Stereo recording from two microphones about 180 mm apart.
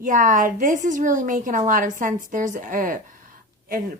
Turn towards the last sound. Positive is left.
turn(degrees=-50)  # may be behind; listen again after turning